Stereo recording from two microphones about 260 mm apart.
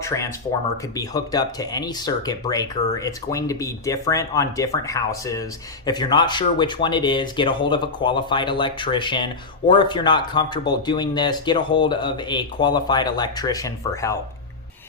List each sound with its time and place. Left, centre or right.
0.0 s speech: centre